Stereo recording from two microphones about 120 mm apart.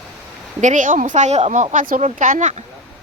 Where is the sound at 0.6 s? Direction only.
90° right; by 1.6 s 65° right (ahead or behind).